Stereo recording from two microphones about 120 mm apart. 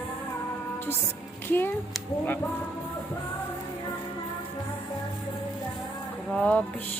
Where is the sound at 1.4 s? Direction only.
15° left (ahead or behind).